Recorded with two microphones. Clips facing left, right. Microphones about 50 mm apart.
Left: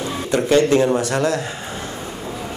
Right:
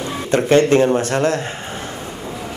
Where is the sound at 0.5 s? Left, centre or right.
Right.